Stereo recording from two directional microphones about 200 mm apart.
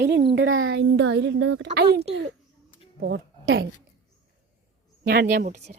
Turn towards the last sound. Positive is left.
turn(degrees=-45)  # may be behind; listen again after turning